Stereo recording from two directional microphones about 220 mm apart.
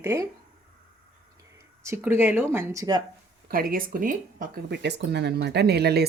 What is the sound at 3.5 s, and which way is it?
Speech, 40° right (ahead or behind).